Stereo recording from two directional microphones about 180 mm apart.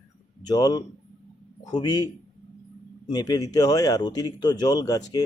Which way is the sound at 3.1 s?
20° left (ahead or behind).